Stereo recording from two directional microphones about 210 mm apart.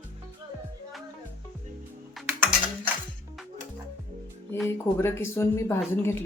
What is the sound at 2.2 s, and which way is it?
Typing, centre (ahead or behind).